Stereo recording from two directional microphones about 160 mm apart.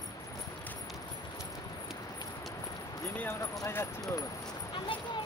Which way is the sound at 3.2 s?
15° left (ahead or behind).